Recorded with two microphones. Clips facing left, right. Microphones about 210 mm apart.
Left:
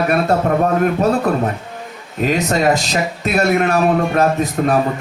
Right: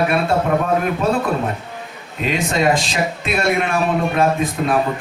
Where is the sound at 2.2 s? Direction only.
40° left (ahead or behind).